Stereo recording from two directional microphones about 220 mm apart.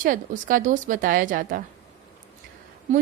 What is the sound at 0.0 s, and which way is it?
A woman's voice, 40° right (ahead or behind).